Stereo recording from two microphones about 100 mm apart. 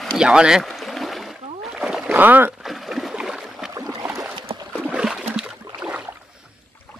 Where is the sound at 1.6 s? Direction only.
5° right (ahead or behind).